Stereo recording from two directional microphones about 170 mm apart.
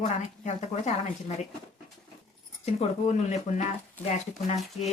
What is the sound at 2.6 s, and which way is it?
Speech, 40° left (ahead or behind).